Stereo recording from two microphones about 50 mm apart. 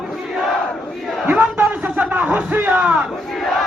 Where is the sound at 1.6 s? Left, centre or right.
Right.